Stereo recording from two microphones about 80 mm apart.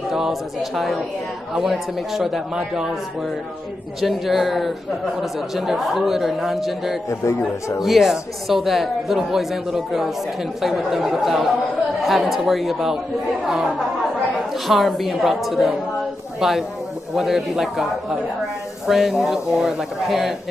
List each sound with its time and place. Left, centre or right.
0.1 s speech: centre
4.0 s speech: centre
7.1 s speech: left
7.8 s speech: centre
14.5 s speech: centre
18.9 s speech: centre